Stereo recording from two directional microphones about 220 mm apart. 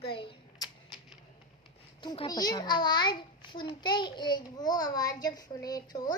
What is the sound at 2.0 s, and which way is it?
A child's voice, 20° left (ahead or behind).